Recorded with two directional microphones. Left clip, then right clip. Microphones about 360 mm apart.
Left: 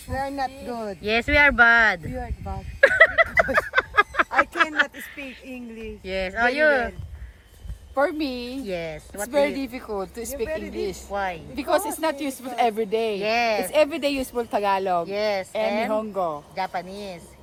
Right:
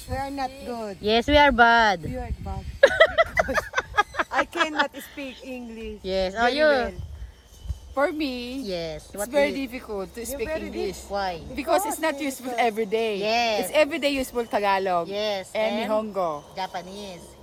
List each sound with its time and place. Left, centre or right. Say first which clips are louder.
0.1 s speech: left 2 dB; centre
4.2 s a sound: left 3 dB; centre
5.5 s speech: right 1 dB; right
6.0 s speech: even; centre
7.9 s speech: left 1 dB; centre